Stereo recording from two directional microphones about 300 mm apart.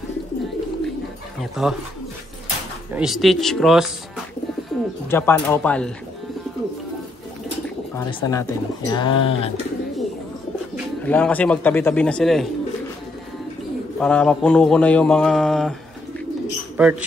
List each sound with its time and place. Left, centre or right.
1.6 s speech: centre
2.9 s speech: centre
5.1 s speech: centre
7.9 s speech: centre
11.1 s speech: centre
13.9 s speech: centre